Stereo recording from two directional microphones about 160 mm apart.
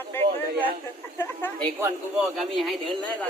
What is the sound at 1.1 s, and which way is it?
Speech, 15° left (ahead or behind).